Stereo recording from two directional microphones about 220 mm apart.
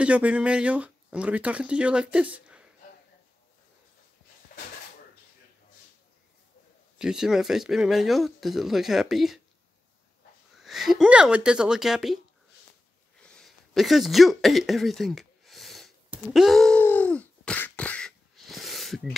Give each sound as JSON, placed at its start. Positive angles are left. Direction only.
{"t": 0.0, "sound": "speech", "side_deg": -5}
{"t": 7.0, "sound": "speech", "side_deg": 0}
{"t": 10.6, "sound": "speech", "side_deg": 0}
{"t": 13.2, "sound": "a sound", "side_deg": 5}